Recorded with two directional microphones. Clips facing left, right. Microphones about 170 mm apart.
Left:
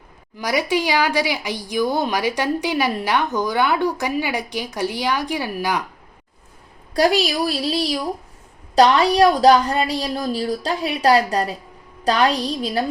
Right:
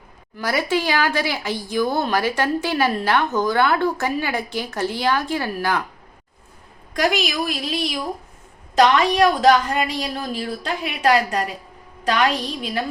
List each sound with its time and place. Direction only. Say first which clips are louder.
0.3 s speech: left 1 dB; 15° left (ahead or behind)
6.9 s a woman's voice: left 3 dB; 35° left (ahead or behind)